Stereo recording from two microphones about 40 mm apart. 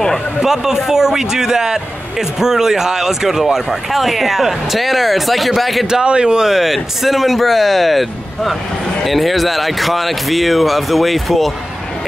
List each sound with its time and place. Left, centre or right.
0.4 s speech: centre
6.0 s speech: right
6.5 s speech: centre